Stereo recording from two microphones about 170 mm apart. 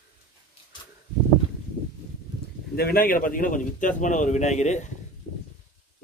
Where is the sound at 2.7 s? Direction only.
60° left (ahead or behind); by 4.9 s 45° left (ahead or behind).